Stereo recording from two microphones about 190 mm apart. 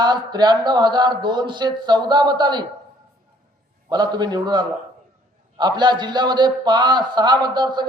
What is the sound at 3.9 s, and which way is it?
A man's voice, 20° right (ahead or behind).